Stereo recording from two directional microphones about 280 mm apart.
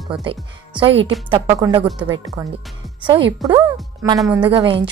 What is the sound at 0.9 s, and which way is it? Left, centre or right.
Speech, right.